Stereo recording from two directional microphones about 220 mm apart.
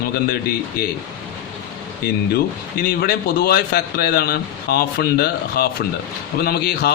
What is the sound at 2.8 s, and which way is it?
A man's voice, 45° left (ahead or behind).